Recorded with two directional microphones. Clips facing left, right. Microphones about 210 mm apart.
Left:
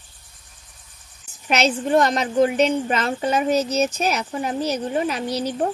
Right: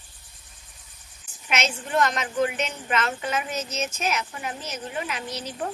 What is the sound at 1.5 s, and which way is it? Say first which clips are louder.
A woman's voice: left 8 dB; 35° left (ahead or behind).